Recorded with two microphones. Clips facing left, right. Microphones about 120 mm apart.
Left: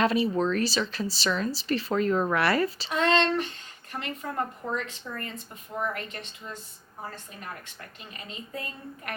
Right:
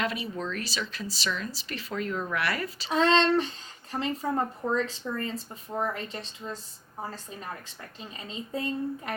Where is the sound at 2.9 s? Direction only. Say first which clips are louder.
Right 3 dB; 30° right (ahead or behind).